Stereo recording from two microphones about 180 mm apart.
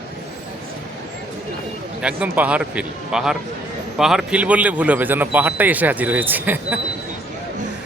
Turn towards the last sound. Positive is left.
turn(degrees=-10)  # may be behind; listen again after turning